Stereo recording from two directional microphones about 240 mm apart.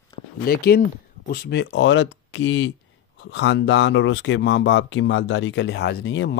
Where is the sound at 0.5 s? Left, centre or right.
Left.